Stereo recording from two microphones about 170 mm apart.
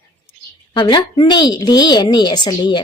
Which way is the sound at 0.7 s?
25° left (ahead or behind).